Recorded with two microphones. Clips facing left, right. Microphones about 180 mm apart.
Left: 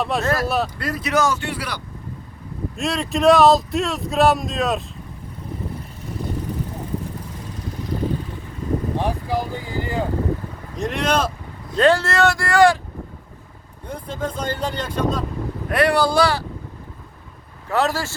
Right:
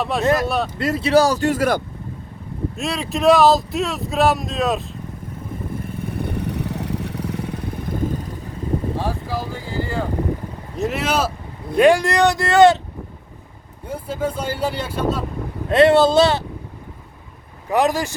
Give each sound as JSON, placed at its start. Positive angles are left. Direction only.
{"t": 0.0, "sound": "speech", "side_deg": 0}
{"t": 0.8, "sound": "speech", "side_deg": -25}
{"t": 2.7, "sound": "speech", "side_deg": 0}
{"t": 5.8, "sound": "vehicle", "side_deg": -60}
{"t": 9.0, "sound": "speech", "side_deg": 20}
{"t": 10.8, "sound": "speech", "side_deg": -5}
{"t": 13.8, "sound": "speech", "side_deg": -5}
{"t": 15.7, "sound": "speech", "side_deg": -25}
{"t": 17.7, "sound": "speech", "side_deg": -15}